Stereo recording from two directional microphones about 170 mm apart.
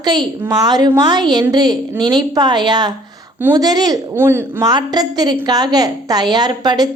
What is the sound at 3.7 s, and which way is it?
A woman's voice, 25° right (ahead or behind).